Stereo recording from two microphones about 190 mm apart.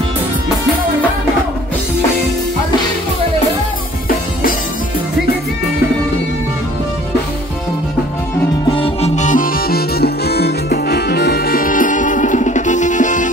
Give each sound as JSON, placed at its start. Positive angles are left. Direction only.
{"t": 8.7, "sound": "music", "side_deg": 30}